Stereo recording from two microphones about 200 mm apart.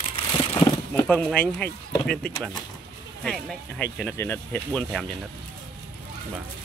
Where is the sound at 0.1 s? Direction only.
25° left (ahead or behind).